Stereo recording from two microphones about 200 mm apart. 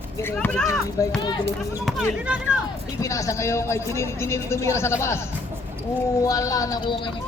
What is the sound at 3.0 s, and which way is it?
Speech, 15° left (ahead or behind).